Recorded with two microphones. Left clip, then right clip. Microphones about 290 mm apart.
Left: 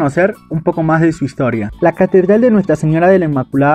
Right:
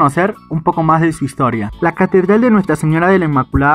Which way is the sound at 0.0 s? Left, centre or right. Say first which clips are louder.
Even; centre.